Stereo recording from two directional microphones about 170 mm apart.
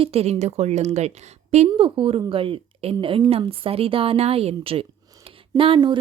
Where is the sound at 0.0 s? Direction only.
35° right (ahead or behind).